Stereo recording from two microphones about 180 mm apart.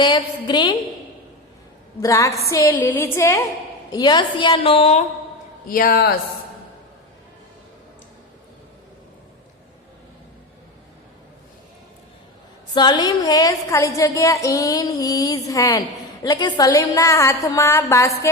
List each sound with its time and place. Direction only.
0.0 s a woman's voice: 25° left (ahead or behind)
2.0 s a woman's voice: 15° left (ahead or behind); by 5.0 s 35° left (ahead or behind)
5.6 s a man's voice: 55° left (ahead or behind)
12.7 s a woman's voice: 25° left (ahead or behind)